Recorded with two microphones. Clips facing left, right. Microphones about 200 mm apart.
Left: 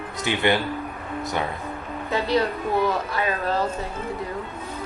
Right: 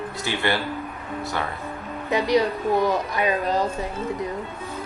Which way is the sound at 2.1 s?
15° right (ahead or behind).